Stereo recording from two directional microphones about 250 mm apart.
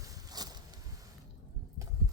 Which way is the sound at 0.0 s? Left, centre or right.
Centre.